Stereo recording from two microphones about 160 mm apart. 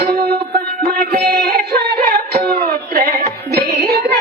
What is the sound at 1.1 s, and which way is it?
Music, 80° right.